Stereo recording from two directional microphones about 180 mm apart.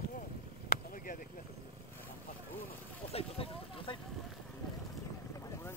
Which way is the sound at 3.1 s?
30° left (ahead or behind).